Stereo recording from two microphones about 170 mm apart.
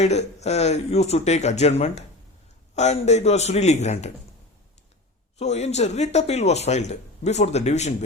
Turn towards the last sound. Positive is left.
turn(degrees=40)  # may be behind; listen again after turning